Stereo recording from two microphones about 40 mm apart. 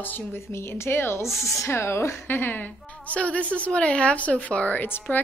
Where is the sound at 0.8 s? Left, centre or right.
Left.